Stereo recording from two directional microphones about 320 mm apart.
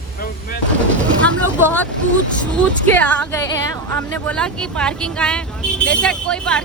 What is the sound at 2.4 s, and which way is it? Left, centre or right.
Speech, centre.